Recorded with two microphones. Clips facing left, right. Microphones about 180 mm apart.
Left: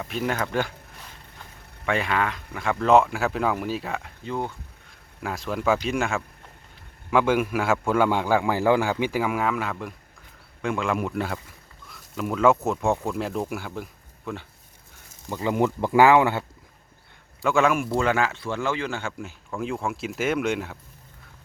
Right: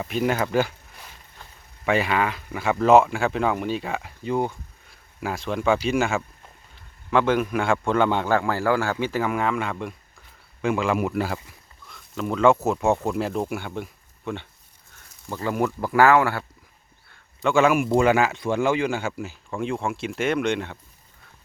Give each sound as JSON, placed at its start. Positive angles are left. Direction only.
{"t": 0.1, "sound": "speech", "side_deg": -5}
{"t": 1.8, "sound": "speech", "side_deg": -5}
{"t": 4.2, "sound": "speech", "side_deg": -15}
{"t": 5.2, "sound": "a man's voice", "side_deg": 0}
{"t": 15.3, "sound": "speech", "side_deg": 15}
{"t": 17.4, "sound": "speech", "side_deg": 0}
{"t": 17.8, "sound": "speech", "side_deg": -15}